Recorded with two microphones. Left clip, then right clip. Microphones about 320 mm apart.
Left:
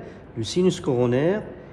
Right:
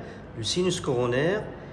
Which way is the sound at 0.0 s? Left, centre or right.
Centre.